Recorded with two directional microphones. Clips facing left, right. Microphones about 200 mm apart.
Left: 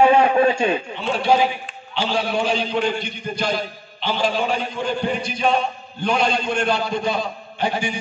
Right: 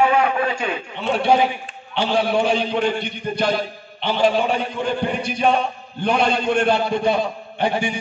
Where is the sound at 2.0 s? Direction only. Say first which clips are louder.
Right 3 dB; 60° right (ahead or behind).